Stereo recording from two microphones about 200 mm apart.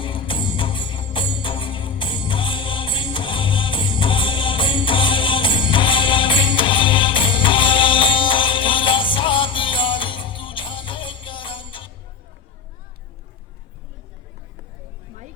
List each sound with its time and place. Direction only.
0.0 s music: 25° left (ahead or behind)